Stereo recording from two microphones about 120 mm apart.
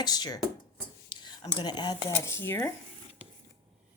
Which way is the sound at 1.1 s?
40° left (ahead or behind).